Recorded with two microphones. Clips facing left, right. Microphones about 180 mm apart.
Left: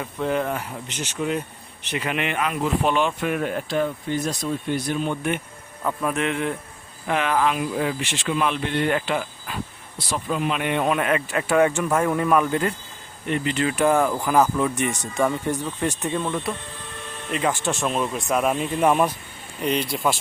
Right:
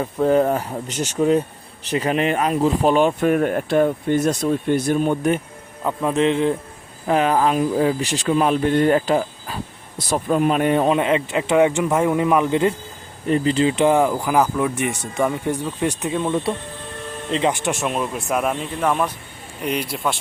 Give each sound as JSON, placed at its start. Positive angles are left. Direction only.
{"t": 0.0, "sound": "speech", "side_deg": -40}
{"t": 5.8, "sound": "speech", "side_deg": -20}
{"t": 10.0, "sound": "speech", "side_deg": -45}
{"t": 10.8, "sound": "speech", "side_deg": -25}
{"t": 13.2, "sound": "speech", "side_deg": -35}
{"t": 16.3, "sound": "speech", "side_deg": -30}
{"t": 18.8, "sound": "speech", "side_deg": 10}
{"t": 19.6, "sound": "speech", "side_deg": -5}